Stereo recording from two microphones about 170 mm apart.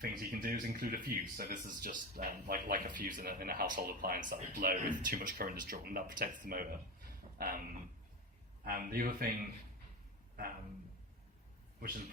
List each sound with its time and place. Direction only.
0.0 s speech: 60° right (ahead or behind)
7.3 s a sound: 60° right (ahead or behind)
8.6 s speech: 60° right (ahead or behind)